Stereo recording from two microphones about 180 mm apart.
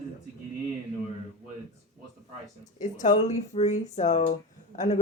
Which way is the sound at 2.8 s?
45° left (ahead or behind).